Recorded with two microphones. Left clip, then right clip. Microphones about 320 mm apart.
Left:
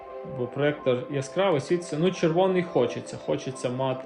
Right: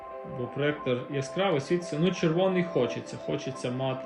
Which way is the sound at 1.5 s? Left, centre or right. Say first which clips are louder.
Left 3 dB; left.